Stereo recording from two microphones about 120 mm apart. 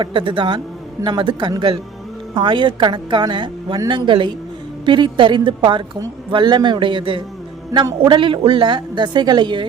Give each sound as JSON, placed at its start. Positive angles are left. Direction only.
{"t": 0.0, "sound": "a man's voice", "side_deg": -45}